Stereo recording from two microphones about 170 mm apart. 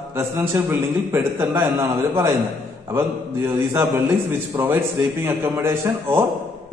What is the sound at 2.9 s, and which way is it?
A man's voice, 15° right (ahead or behind).